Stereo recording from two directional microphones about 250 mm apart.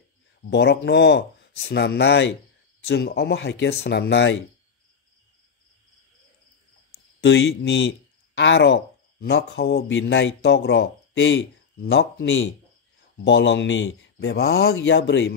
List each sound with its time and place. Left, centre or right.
0.4 s a man's voice: left
7.2 s a man's voice: left